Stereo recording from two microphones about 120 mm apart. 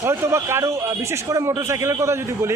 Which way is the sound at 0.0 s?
25° right (ahead or behind).